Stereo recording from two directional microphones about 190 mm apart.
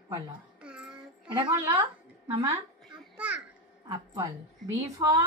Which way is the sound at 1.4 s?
25° right (ahead or behind).